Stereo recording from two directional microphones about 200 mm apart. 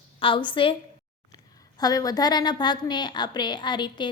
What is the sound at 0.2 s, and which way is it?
Speech, 25° left (ahead or behind).